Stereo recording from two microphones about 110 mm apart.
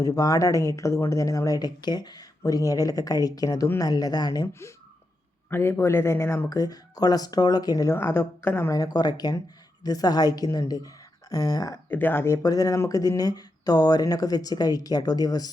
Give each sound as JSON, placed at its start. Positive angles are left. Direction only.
{"t": 0.0, "sound": "speech", "side_deg": 30}
{"t": 5.5, "sound": "speech", "side_deg": 20}
{"t": 7.9, "sound": "a woman's voice", "side_deg": 20}
{"t": 8.7, "sound": "a woman's voice", "side_deg": 35}
{"t": 11.9, "sound": "speech", "side_deg": 15}